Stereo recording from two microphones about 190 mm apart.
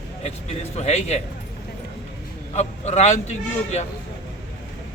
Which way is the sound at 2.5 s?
35° left (ahead or behind).